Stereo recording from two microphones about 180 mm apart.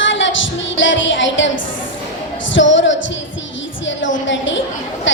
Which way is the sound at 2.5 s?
90° left.